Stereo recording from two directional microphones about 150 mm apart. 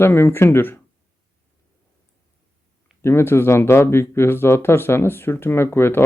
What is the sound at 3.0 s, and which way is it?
Speech, 15° left (ahead or behind).